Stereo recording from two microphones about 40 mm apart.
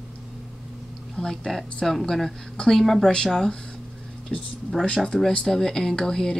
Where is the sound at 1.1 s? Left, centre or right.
Centre.